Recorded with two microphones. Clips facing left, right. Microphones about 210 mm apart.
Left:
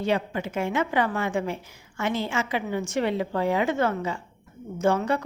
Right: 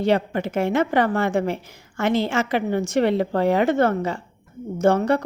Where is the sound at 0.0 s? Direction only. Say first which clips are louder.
Right 5 dB; 75° right (ahead or behind).